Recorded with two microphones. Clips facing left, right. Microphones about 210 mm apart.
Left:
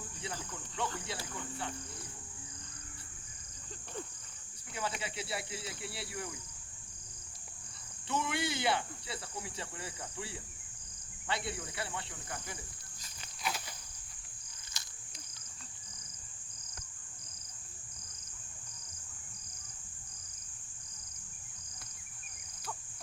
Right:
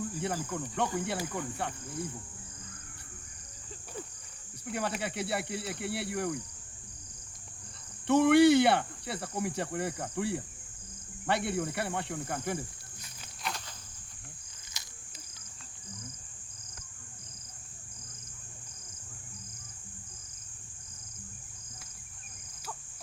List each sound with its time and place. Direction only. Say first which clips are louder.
0.4 s speech: right 7 dB; 60° right (ahead or behind)
4.7 s speech: right 6 dB; 60° right (ahead or behind)
8.0 s speech: right 15 dB; 65° right (ahead or behind)
13.4 s insect: even; centre (ahead or behind)
14.8 s a sound: right 1 dB; 20° right (ahead or behind)